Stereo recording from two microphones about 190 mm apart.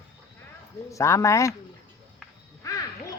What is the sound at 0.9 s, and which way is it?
Speech, 15° left (ahead or behind).